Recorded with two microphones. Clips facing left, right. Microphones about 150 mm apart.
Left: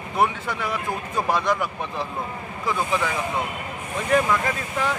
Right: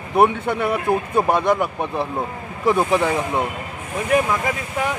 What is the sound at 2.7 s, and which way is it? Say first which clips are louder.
Speech: right 7 dB; 30° right (ahead or behind).